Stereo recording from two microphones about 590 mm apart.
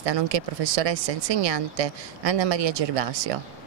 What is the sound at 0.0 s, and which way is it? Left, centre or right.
Speech, right.